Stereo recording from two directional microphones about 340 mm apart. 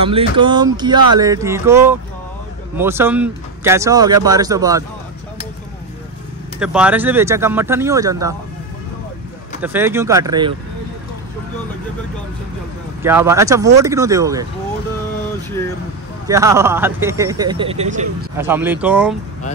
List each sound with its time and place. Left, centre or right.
0.0 s speech: centre
6.6 s speech: centre
9.6 s speech: centre
13.0 s speech: centre
16.3 s speech: centre
18.4 s speech: centre